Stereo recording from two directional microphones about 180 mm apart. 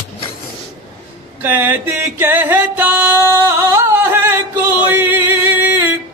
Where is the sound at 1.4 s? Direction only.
10° right (ahead or behind).